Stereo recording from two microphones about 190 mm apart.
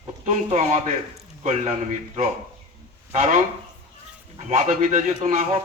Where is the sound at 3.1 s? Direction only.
40° right (ahead or behind).